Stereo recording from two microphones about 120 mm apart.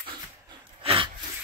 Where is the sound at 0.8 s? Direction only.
50° right (ahead or behind).